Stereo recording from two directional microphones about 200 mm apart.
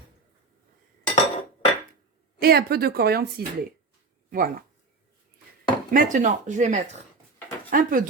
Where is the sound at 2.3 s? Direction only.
50° right (ahead or behind).